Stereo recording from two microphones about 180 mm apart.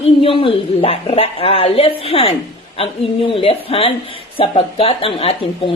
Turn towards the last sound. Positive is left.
turn(degrees=30)  # may be behind; listen again after turning